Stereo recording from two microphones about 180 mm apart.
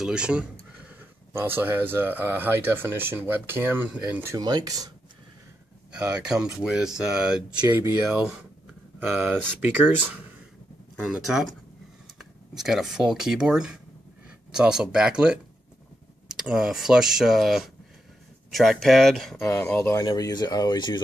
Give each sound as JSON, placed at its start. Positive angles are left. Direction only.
{"t": 0.0, "sound": "speech", "side_deg": -5}
{"t": 5.9, "sound": "speech", "side_deg": -5}
{"t": 11.3, "sound": "speech", "side_deg": -5}
{"t": 16.3, "sound": "speech", "side_deg": -5}
{"t": 19.5, "sound": "speech", "side_deg": 10}